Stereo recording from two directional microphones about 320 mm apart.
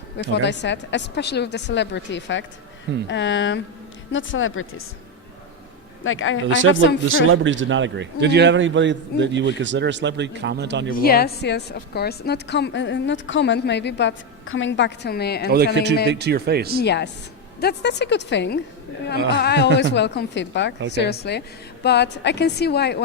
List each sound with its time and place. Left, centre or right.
0.2 s a woman's voice: left
6.0 s a woman's voice: left
6.5 s a man's voice: right
10.9 s a woman's voice: left
15.5 s a man's voice: right
16.8 s a woman's voice: left